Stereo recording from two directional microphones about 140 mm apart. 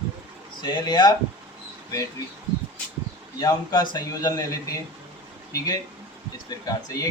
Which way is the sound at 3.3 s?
30° left (ahead or behind).